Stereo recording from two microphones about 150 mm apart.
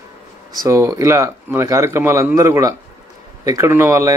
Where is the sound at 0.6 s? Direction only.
20° right (ahead or behind).